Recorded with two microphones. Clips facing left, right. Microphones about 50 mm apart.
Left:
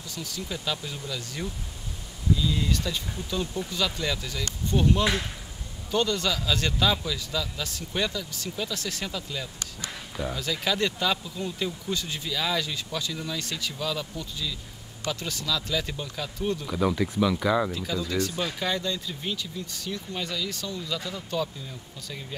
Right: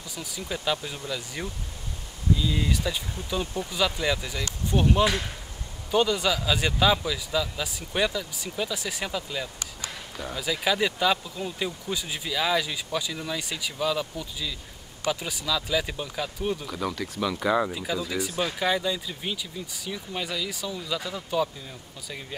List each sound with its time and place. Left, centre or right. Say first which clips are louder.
0.1 s speech: right 1 dB; centre
9.8 s speech: left 4 dB; centre
10.3 s speech: right 4 dB; centre
16.6 s speech: left 4 dB; centre
16.9 s speech: left 6 dB; centre
17.2 s speech: even; centre